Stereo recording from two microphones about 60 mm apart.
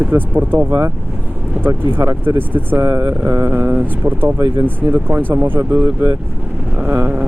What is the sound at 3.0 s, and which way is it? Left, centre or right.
Speech, right.